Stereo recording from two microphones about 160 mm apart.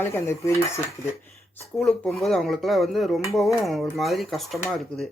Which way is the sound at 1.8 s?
Centre (ahead or behind).